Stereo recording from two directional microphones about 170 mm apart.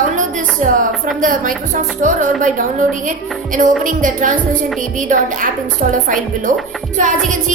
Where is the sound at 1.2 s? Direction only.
50° right (ahead or behind).